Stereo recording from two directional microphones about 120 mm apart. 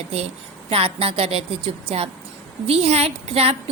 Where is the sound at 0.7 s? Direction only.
50° right (ahead or behind).